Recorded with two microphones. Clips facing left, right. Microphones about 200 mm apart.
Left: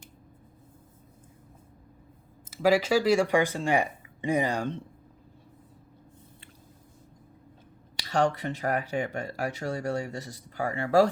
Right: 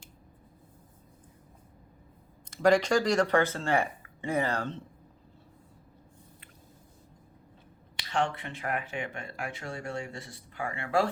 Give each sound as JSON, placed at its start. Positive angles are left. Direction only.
{"t": 2.5, "sound": "speech", "side_deg": 5}
{"t": 7.9, "sound": "speech", "side_deg": 40}